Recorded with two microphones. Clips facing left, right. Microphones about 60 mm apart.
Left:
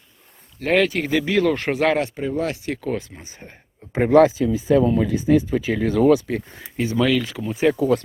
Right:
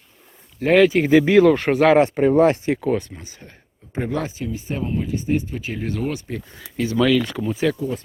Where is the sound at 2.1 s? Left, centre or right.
Right.